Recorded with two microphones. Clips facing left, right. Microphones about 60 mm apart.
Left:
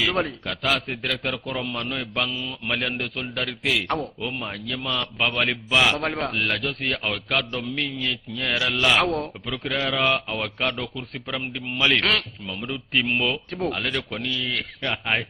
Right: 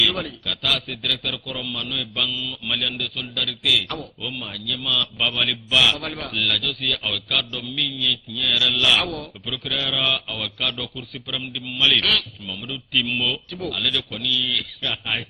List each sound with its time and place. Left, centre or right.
0.0 s a man's voice: left